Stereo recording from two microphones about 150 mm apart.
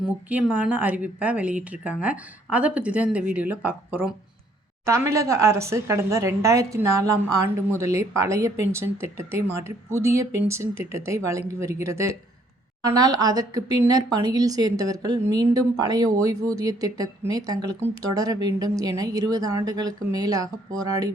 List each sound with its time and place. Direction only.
0.0 s a woman's voice: 10° right (ahead or behind); by 21.1 s 25° right (ahead or behind)